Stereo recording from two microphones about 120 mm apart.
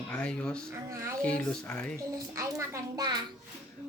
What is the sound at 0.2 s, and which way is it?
Speech, 10° left (ahead or behind).